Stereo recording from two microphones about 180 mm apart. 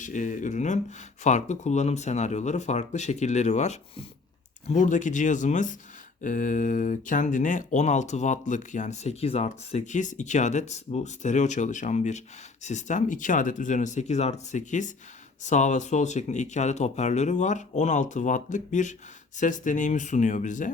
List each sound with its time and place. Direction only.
0.0 s speech: 45° left (ahead or behind)